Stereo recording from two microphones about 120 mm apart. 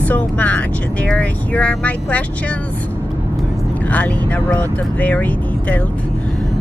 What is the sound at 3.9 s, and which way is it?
Speech, 10° left (ahead or behind).